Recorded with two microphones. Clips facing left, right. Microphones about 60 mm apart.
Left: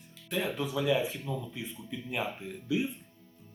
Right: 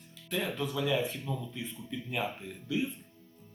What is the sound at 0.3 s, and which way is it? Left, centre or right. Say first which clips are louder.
Speech: left 1 dB; centre.